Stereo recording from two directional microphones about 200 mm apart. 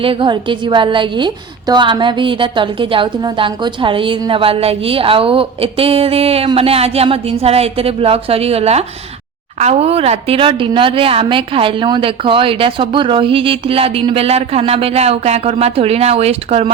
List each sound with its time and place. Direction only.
0.0 s a woman's voice: 25° right (ahead or behind)